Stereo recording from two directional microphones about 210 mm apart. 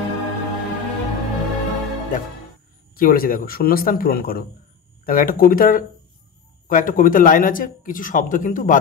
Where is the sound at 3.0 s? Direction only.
45° left (ahead or behind).